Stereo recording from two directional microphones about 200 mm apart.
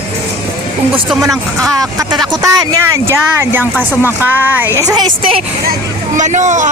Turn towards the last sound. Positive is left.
turn(degrees=-35)  # may be behind; listen again after turning